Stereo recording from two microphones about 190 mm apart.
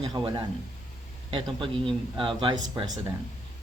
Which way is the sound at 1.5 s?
25° right (ahead or behind).